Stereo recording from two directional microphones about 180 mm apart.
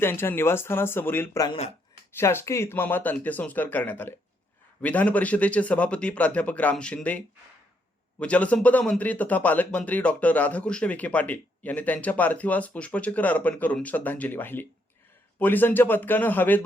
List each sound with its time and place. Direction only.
0.0 s speech: 10° left (ahead or behind)
1.5 s speech: 35° left (ahead or behind)
2.1 s speech: 15° left (ahead or behind)
8.2 s speech: 5° left (ahead or behind)